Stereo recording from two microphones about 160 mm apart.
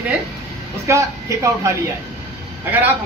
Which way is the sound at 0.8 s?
20° right (ahead or behind).